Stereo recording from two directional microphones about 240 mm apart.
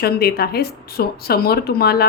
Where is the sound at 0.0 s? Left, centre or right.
Left.